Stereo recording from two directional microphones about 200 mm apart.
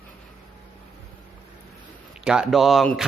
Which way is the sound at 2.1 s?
5° right (ahead or behind).